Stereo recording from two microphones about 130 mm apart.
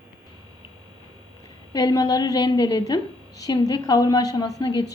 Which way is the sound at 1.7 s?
30° left (ahead or behind).